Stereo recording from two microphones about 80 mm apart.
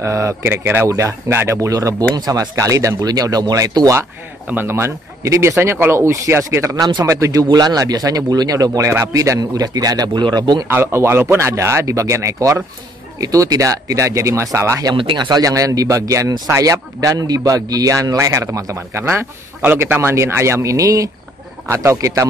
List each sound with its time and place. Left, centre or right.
0.0 s speech: right
4.5 s speech: right
7.4 s speech: right
9.4 s speech: right
10.7 s speech: right
15.0 s speech: right